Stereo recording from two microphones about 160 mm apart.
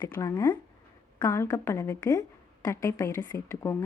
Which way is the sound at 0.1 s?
20° left (ahead or behind).